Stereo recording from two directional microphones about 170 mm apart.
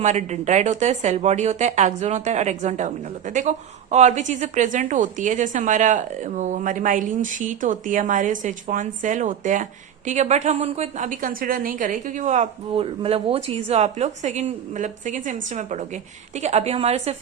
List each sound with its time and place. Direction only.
0.0 s a woman's voice: 45° right (ahead or behind)